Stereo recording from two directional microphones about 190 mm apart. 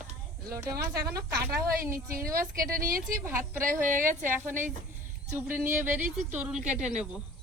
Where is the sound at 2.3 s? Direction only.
50° right (ahead or behind).